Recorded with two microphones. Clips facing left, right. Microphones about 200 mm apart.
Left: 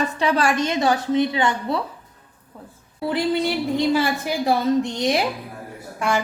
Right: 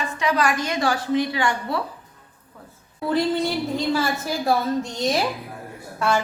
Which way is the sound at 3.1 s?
15° left (ahead or behind).